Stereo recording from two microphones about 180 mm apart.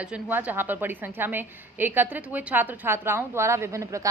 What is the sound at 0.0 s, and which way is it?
A woman's voice, 5° right (ahead or behind).